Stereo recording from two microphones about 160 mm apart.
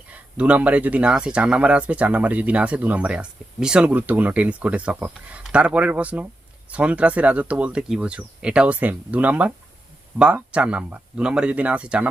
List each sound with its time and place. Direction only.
0.1 s speech: 10° right (ahead or behind)